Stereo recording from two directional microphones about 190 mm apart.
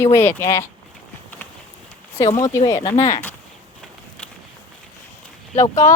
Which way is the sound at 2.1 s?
15° left (ahead or behind).